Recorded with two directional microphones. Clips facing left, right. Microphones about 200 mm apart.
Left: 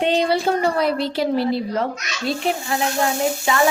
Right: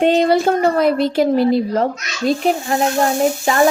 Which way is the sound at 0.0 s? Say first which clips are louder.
Right 5 dB; 45° right (ahead or behind).